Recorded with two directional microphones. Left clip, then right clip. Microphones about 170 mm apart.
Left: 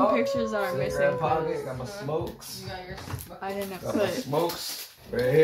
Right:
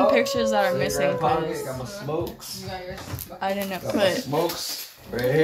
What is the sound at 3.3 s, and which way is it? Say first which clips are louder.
Speech: right 7 dB; 65° right (ahead or behind).